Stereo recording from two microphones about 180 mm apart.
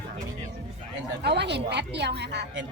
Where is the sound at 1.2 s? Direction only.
70° right (ahead or behind).